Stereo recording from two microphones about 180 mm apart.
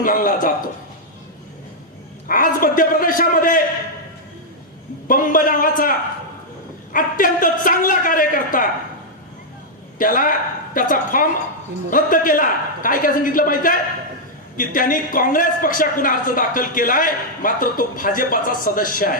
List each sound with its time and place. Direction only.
0.0 s a woman's voice: 50° left (ahead or behind)
2.2 s a woman's voice: 50° left (ahead or behind)
5.0 s a man's voice: 50° left (ahead or behind)
10.0 s a woman's voice: 50° left (ahead or behind)